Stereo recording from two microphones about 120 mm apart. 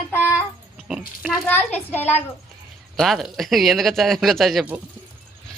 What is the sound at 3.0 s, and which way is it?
Speech, centre (ahead or behind).